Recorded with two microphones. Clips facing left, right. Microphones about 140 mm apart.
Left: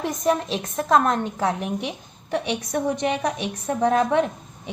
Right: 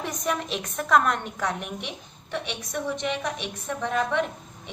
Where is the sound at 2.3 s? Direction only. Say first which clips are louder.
Left 7 dB; 45° left (ahead or behind).